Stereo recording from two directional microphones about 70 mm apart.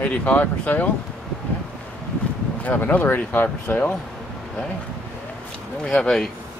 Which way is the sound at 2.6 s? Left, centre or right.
Left.